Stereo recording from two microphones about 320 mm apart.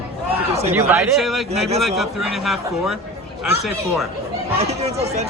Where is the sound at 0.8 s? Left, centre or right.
Centre.